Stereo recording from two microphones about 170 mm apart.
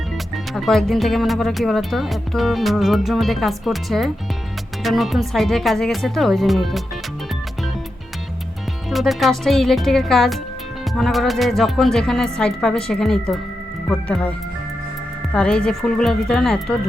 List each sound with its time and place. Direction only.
0.5 s speech: centre (ahead or behind)
8.9 s speech: centre (ahead or behind)